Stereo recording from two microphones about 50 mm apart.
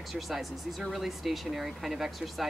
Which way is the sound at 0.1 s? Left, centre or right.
Centre.